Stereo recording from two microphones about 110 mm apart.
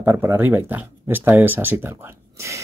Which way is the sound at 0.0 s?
25° right (ahead or behind).